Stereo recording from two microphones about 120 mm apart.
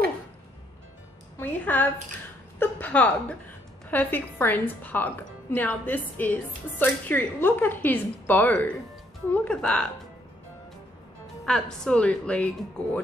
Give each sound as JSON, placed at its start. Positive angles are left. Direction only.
{"t": 1.4, "sound": "a woman's voice", "side_deg": 15}
{"t": 11.4, "sound": "a woman's voice", "side_deg": 5}